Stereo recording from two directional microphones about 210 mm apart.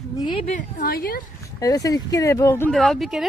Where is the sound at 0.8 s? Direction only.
45° left (ahead or behind).